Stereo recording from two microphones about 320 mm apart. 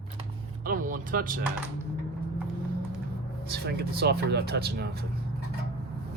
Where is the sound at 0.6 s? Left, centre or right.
Right.